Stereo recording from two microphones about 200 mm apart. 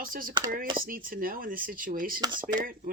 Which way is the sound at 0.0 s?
45° right (ahead or behind).